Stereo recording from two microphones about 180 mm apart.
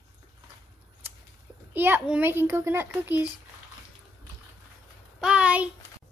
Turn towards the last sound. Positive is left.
turn(degrees=-5)  # may be behind; listen again after turning